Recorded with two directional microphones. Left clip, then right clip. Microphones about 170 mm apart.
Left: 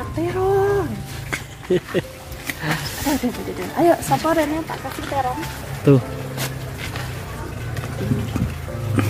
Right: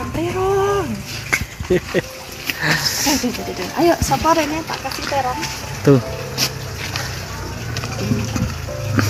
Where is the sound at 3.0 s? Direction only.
30° left (ahead or behind).